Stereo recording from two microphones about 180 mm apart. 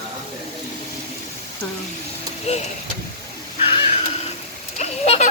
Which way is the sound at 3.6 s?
30° left (ahead or behind).